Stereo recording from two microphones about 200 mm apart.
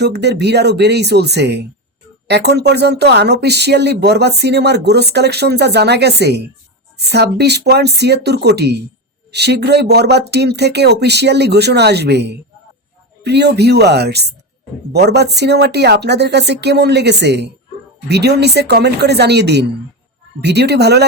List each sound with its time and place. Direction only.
0.0 s speech: 55° right (ahead or behind)